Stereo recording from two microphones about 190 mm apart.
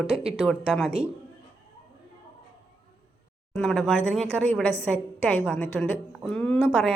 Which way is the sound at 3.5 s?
Centre (ahead or behind).